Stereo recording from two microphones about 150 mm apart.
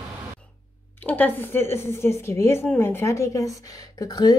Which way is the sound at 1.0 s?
10° left (ahead or behind).